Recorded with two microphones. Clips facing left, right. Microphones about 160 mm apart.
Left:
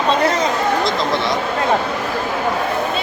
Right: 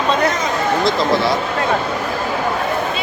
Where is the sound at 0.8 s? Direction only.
Centre (ahead or behind).